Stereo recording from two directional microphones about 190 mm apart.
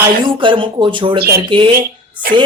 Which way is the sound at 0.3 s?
25° right (ahead or behind).